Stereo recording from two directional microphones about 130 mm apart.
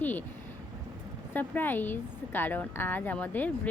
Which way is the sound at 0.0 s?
15° left (ahead or behind).